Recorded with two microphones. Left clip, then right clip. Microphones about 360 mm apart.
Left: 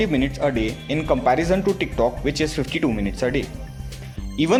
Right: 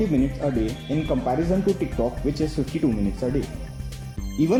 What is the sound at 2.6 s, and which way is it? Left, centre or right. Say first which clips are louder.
Speech: left 2 dB; left.